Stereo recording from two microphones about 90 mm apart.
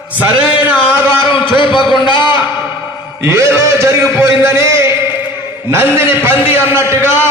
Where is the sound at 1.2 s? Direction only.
65° left (ahead or behind).